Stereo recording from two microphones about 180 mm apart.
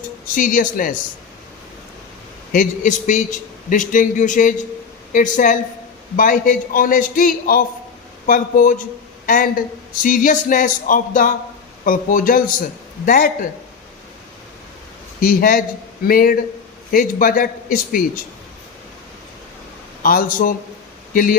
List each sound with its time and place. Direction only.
0.3 s a man's voice: 45° left (ahead or behind)
2.5 s a man's voice: 45° left (ahead or behind)
15.2 s a man's voice: 50° left (ahead or behind)
20.0 s a man's voice: 50° left (ahead or behind)